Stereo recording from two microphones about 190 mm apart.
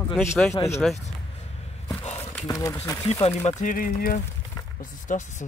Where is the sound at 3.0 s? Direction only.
30° left (ahead or behind).